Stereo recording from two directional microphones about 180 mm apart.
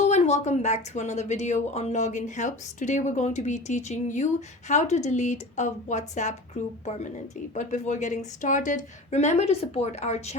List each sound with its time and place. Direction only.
0.0 s speech: 40° left (ahead or behind)